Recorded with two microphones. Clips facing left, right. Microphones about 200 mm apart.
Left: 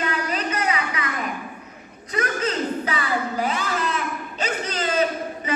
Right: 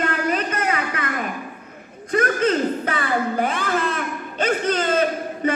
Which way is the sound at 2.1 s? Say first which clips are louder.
Right 6 dB; 50° right (ahead or behind).